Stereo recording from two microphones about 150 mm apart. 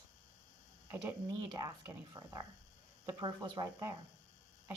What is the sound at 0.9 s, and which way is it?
Speech, 20° right (ahead or behind).